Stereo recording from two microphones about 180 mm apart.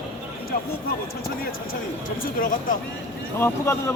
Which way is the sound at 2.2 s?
50° left (ahead or behind).